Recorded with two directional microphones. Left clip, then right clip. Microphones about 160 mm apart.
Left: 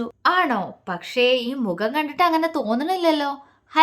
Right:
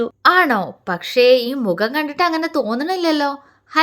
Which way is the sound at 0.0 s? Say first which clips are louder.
Right 6 dB; 25° right (ahead or behind).